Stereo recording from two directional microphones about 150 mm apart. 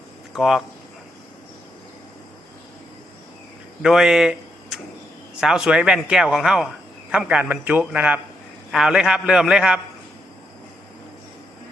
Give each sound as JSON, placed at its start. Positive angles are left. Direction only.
{"t": 0.3, "sound": "speech", "side_deg": -5}
{"t": 3.8, "sound": "a man's voice", "side_deg": -5}